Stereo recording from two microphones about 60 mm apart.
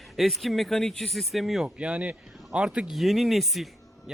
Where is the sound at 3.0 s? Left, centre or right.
Centre.